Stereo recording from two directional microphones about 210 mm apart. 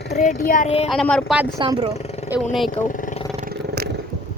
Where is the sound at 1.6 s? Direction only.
20° right (ahead or behind).